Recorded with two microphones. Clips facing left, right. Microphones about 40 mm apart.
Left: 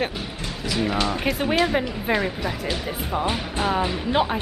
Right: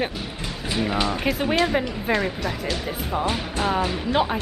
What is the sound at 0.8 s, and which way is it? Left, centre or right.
Speech, centre.